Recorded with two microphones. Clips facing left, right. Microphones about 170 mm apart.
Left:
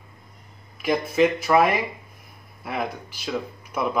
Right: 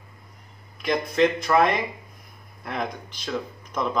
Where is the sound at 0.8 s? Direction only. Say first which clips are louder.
Left 1 dB; 5° left (ahead or behind).